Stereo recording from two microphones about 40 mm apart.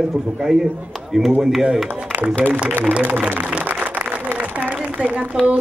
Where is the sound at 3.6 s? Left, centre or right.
Right.